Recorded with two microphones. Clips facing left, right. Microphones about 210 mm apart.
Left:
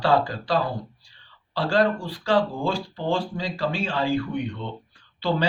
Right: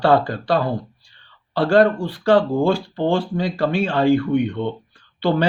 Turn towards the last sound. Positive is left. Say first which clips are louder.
# right 6 dB
turn(degrees=-60)  # may be behind; listen again after turning